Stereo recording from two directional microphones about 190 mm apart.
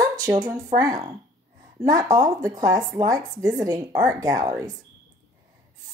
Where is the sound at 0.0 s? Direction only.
20° right (ahead or behind).